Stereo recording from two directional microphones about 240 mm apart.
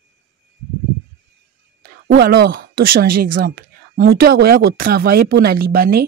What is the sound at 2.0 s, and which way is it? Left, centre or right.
Speech, right.